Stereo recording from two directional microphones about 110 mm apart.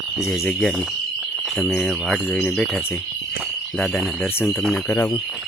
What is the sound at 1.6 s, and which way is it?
Speech, 5° left (ahead or behind).